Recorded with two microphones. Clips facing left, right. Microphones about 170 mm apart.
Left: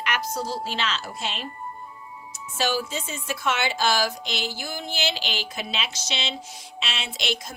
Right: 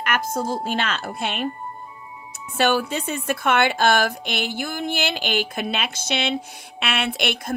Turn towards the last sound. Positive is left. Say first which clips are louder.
# right 5 dB
turn(degrees=-60)  # may be behind; listen again after turning